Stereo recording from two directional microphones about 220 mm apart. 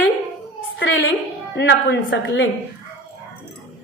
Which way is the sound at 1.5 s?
50° left (ahead or behind).